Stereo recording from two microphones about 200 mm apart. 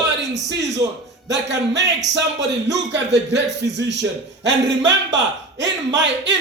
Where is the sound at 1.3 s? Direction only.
60° right (ahead or behind).